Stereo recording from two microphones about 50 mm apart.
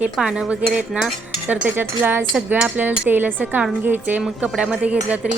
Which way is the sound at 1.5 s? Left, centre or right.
Right.